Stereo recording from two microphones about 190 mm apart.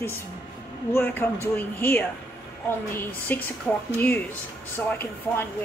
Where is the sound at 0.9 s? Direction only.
10° left (ahead or behind).